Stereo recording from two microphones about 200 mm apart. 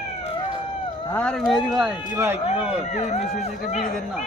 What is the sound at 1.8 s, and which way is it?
Speech, 10° right (ahead or behind).